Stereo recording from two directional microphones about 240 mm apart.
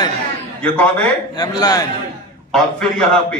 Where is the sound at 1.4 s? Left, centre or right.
Centre.